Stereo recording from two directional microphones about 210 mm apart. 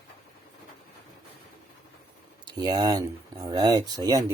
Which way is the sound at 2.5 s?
20° right (ahead or behind).